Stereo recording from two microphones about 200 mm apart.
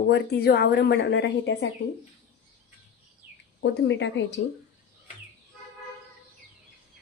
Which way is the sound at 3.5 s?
65° left (ahead or behind).